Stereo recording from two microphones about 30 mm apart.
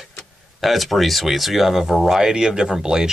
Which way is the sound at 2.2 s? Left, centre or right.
Right.